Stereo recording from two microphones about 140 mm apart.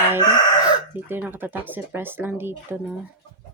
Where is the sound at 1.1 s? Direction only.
15° right (ahead or behind).